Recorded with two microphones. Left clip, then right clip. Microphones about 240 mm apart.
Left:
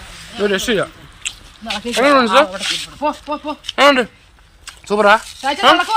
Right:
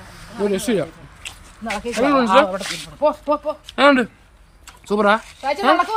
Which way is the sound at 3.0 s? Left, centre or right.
Right.